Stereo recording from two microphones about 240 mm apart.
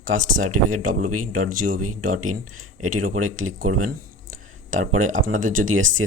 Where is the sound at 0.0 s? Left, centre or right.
Right.